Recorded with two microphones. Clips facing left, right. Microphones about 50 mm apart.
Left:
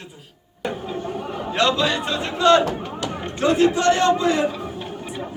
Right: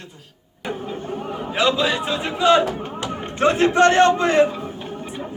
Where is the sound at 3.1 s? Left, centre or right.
Right.